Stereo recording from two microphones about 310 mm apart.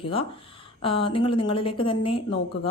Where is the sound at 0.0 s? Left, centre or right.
Centre.